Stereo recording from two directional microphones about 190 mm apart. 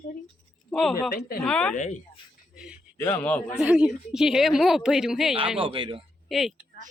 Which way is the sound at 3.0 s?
10° left (ahead or behind).